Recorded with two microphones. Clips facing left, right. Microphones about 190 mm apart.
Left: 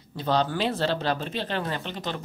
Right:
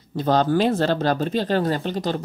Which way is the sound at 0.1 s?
45° right (ahead or behind).